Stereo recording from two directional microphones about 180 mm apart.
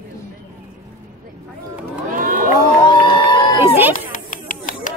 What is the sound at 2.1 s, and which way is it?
Crowd, 50° right (ahead or behind).